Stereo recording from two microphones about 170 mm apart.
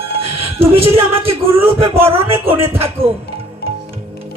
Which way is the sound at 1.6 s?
35° right (ahead or behind).